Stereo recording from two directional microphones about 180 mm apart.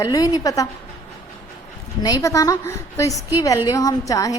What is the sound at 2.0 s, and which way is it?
A woman's voice, 20° left (ahead or behind).